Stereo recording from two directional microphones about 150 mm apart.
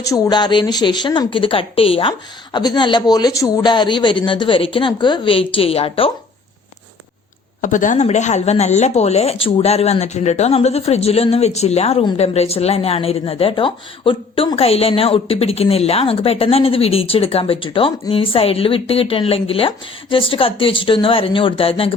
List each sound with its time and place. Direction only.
0.1 s a woman's voice: 30° left (ahead or behind)
7.6 s a woman's voice: 60° left (ahead or behind); by 21.9 s 40° left (ahead or behind)